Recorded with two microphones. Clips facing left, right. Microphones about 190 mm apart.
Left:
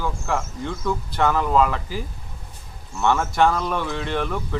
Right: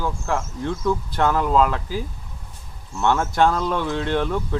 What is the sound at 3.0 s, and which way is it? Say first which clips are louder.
Speech: even; 10° left (ahead or behind).